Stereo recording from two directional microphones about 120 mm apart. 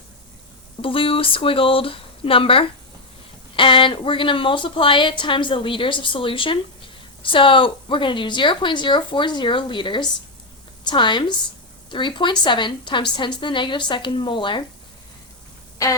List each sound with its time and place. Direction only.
0.8 s a woman's voice: 50° left (ahead or behind)